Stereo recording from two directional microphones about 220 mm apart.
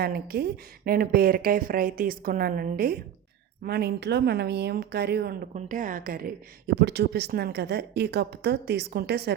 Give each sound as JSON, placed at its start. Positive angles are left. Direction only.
{"t": 0.0, "sound": "a woman's voice", "side_deg": -45}